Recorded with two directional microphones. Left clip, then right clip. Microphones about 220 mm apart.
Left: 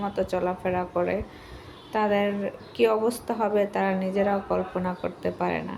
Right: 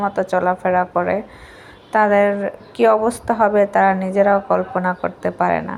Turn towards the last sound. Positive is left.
turn(degrees=-20)  # may be behind; listen again after turning